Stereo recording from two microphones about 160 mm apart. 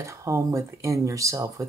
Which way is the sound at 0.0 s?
20° right (ahead or behind).